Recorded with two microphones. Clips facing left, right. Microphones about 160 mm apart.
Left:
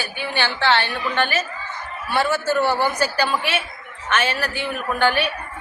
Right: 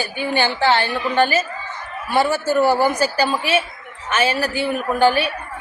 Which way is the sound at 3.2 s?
35° right (ahead or behind).